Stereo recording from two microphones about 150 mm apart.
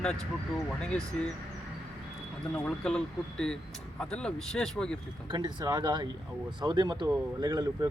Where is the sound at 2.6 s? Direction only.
5° left (ahead or behind).